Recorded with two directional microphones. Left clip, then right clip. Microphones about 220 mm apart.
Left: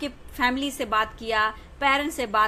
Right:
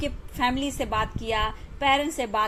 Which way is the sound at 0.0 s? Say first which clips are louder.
Left 1 dB; 15° left (ahead or behind).